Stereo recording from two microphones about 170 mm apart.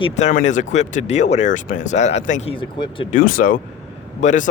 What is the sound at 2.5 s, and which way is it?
Speech, 30° left (ahead or behind).